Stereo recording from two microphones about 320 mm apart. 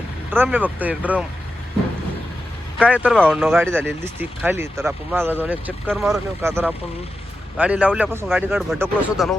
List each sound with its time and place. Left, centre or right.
0.3 s speech: centre
2.7 s speech: centre